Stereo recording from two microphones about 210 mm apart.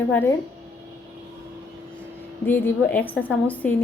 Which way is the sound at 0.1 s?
10° left (ahead or behind).